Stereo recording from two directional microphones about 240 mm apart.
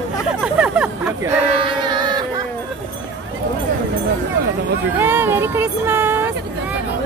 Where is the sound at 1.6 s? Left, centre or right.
Centre.